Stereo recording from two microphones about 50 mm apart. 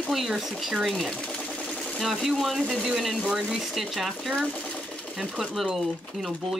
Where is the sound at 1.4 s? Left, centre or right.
Left.